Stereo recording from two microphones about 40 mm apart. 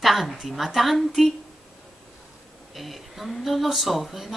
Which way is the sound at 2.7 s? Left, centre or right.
Centre.